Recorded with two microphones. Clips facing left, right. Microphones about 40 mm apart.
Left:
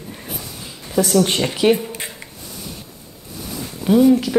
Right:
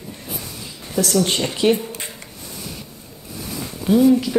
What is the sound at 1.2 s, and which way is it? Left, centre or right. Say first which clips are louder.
Speech: left 1 dB; centre.